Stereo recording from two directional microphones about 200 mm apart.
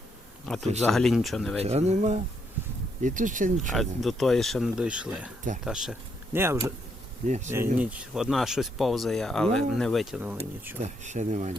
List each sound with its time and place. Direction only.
0.4 s speech: centre (ahead or behind)
1.6 s speech: 30° right (ahead or behind)
3.7 s speech: centre (ahead or behind)
7.3 s speech: 35° right (ahead or behind)
7.8 s speech: 5° right (ahead or behind)
10.8 s speech: 35° right (ahead or behind)